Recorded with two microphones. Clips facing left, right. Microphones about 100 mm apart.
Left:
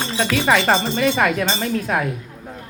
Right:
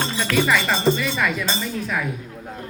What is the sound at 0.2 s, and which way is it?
Speech, 55° left (ahead or behind).